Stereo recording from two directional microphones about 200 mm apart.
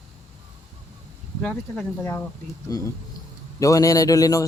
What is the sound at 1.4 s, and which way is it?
Speech, 5° left (ahead or behind).